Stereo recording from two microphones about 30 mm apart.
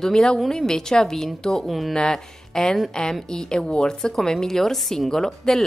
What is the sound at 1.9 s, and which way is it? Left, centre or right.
A woman's voice, left.